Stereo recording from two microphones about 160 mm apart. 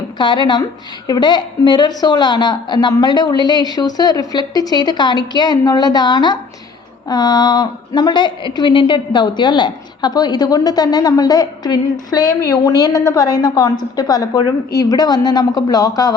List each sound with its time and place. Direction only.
0.2 s a woman's voice: 30° left (ahead or behind)